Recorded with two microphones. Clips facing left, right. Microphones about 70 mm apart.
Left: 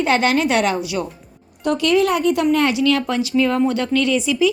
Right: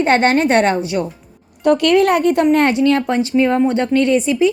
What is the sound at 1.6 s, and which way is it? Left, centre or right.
A woman's voice, right.